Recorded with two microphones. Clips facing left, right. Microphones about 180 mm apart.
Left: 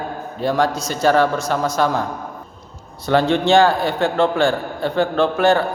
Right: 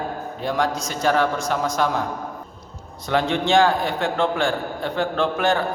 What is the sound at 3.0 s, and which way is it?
A man's voice, 70° left (ahead or behind).